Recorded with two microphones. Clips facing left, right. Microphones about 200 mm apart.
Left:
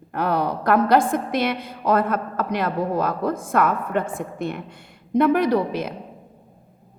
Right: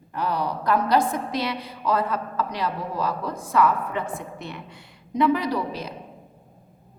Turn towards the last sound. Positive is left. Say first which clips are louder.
# left 7 dB
turn(degrees=55)  # may be behind; listen again after turning